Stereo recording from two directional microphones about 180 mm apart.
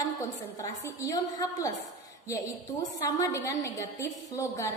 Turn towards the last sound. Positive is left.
turn(degrees=15)  # may be behind; listen again after turning